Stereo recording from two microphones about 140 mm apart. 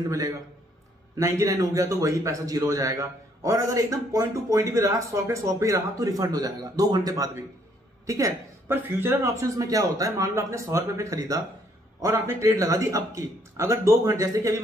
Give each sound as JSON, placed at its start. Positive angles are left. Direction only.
{"t": 1.1, "sound": "a man's voice", "side_deg": -20}